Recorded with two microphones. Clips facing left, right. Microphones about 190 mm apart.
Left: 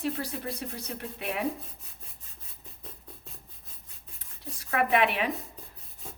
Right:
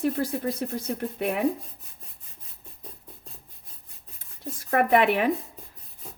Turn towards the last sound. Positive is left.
turn(degrees=-50)  # may be behind; listen again after turning